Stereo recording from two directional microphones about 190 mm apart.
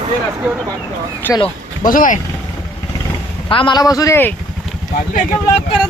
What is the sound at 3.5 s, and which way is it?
Speech, 25° left (ahead or behind).